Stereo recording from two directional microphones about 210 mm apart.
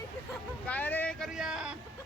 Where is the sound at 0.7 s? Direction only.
10° left (ahead or behind).